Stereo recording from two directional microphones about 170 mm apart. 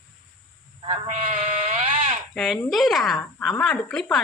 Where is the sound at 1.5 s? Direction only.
40° right (ahead or behind).